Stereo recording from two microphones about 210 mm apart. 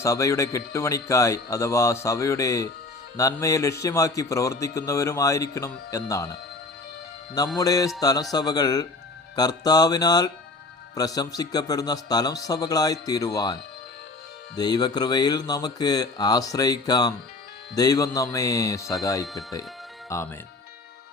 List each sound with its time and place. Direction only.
0.0 s a man's voice: 15° left (ahead or behind)
7.6 s a man's voice: 15° left (ahead or behind)
19.2 s speech: centre (ahead or behind)
20.1 s speech: 15° left (ahead or behind)